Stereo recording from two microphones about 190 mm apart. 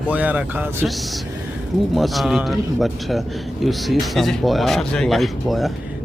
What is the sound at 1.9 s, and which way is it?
Speech, centre (ahead or behind).